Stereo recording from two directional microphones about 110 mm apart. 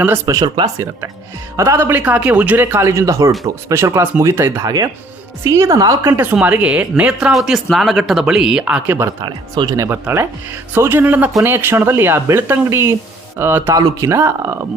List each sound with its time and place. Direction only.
0.3 s speech: 40° right (ahead or behind)
6.4 s speech: 10° right (ahead or behind)
9.2 s speech: 40° right (ahead or behind); by 13.7 s 20° right (ahead or behind)
13.7 s speech: 30° right (ahead or behind)